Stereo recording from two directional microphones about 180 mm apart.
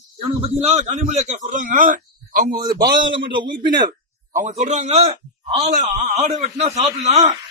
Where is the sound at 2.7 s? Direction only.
60° right (ahead or behind).